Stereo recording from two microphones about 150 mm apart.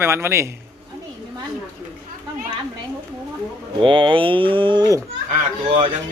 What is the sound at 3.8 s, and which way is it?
Speech, 35° right (ahead or behind).